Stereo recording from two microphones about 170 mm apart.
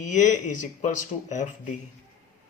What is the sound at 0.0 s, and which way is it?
A man's voice, 50° left (ahead or behind).